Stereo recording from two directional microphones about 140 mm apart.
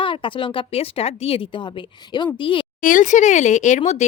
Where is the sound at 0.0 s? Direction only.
35° left (ahead or behind).